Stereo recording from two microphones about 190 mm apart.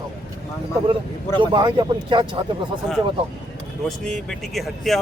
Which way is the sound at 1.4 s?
25° right (ahead or behind).